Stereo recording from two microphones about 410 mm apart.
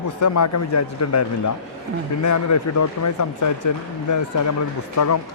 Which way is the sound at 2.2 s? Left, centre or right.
Left.